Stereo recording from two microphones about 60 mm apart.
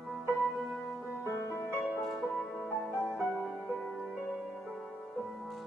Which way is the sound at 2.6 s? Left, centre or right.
Left.